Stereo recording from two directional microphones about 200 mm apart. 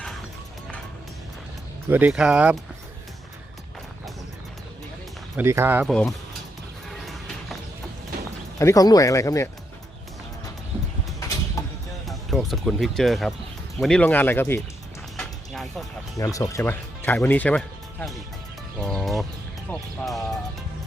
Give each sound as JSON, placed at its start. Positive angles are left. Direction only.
{"t": 1.9, "sound": "speech", "side_deg": -10}
{"t": 5.4, "sound": "speech", "side_deg": -10}
{"t": 5.9, "sound": "speech", "side_deg": 5}
{"t": 8.5, "sound": "speech", "side_deg": 15}
{"t": 12.0, "sound": "speech", "side_deg": 0}
{"t": 15.1, "sound": "music", "side_deg": 0}
{"t": 16.1, "sound": "speech", "side_deg": 15}
{"t": 18.8, "sound": "music", "side_deg": 5}
{"t": 19.7, "sound": "speech", "side_deg": 5}